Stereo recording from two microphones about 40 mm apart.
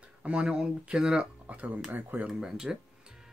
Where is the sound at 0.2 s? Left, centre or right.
Right.